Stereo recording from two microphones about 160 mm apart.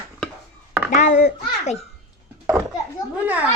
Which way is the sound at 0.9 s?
50° left (ahead or behind).